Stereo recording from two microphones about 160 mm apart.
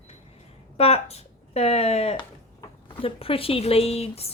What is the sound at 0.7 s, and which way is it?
A woman's voice, 40° left (ahead or behind).